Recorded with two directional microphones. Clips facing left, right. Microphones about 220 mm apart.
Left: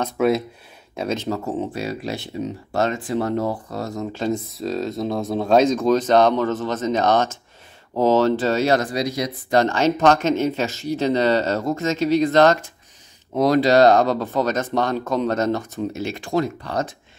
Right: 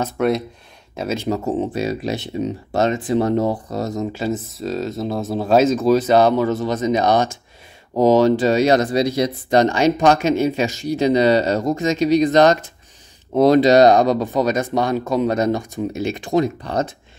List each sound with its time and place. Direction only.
0.0 s speech: centre (ahead or behind); by 4.1 s 20° right (ahead or behind)
4.1 s speech: 5° right (ahead or behind)
13.3 s speech: 25° right (ahead or behind)